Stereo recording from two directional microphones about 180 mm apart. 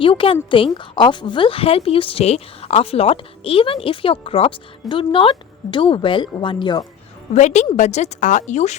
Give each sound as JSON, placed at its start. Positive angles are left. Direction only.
{"t": 0.0, "sound": "a woman's voice", "side_deg": 30}
{"t": 7.3, "sound": "a woman's voice", "side_deg": 40}